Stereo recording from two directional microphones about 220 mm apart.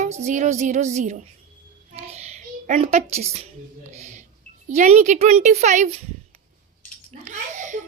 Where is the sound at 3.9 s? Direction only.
30° right (ahead or behind).